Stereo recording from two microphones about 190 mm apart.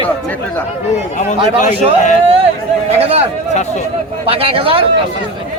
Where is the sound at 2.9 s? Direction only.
30° right (ahead or behind).